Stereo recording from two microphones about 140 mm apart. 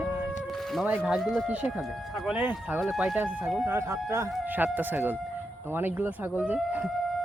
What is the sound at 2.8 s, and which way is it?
Speech, centre (ahead or behind).